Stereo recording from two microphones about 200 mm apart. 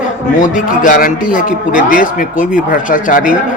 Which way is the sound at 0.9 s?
45° left (ahead or behind).